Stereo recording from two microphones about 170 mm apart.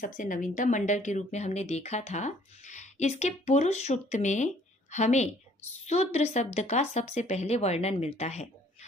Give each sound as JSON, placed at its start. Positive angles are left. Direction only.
{"t": 0.0, "sound": "speech", "side_deg": 50}